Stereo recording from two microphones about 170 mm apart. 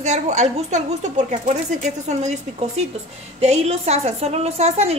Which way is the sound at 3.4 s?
40° right (ahead or behind).